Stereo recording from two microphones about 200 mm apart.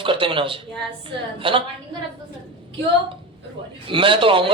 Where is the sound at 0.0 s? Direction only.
25° right (ahead or behind).